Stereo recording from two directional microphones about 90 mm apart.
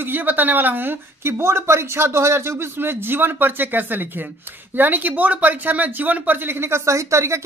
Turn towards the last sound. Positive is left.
turn(degrees=-35)  # may be behind; listen again after turning